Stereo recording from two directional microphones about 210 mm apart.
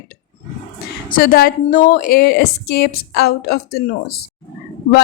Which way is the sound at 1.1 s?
45° left (ahead or behind).